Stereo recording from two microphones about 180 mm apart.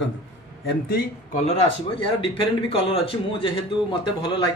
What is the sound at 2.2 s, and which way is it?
A man's voice, 30° left (ahead or behind).